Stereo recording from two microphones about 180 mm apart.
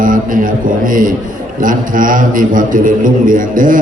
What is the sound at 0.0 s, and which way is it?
A man's voice, 50° right (ahead or behind).